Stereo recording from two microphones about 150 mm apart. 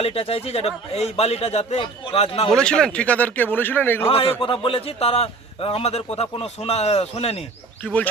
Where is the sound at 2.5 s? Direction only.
5° left (ahead or behind).